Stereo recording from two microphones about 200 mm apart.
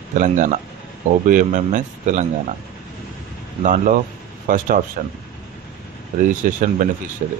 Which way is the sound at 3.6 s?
40° right (ahead or behind).